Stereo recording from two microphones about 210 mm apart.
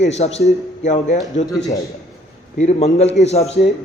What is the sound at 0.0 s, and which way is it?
A man's voice, 30° left (ahead or behind).